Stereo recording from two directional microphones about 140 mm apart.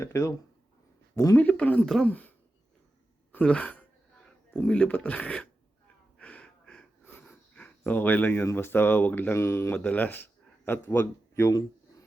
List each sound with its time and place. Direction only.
0.0 s speech: 20° left (ahead or behind)
1.4 s speech: 10° left (ahead or behind)
3.3 s speech: 10° left (ahead or behind)
6.1 s wheeze: 10° left (ahead or behind)
10.7 s a man's voice: 15° left (ahead or behind)